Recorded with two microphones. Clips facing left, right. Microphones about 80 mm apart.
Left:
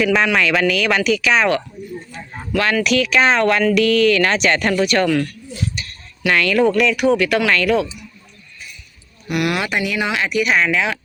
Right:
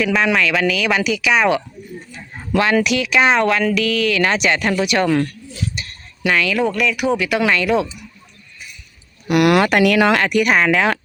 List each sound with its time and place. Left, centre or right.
0.0 s speech: centre
2.8 s speech: centre
5.7 s a sound: right
6.2 s speech: centre
9.3 s speech: right